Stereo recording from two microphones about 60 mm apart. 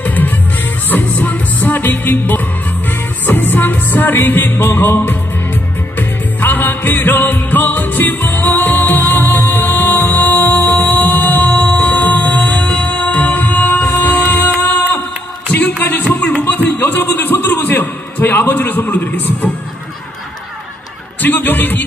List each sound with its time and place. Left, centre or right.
0.0 s music: left
16.1 s a sound: centre
21.2 s speech: left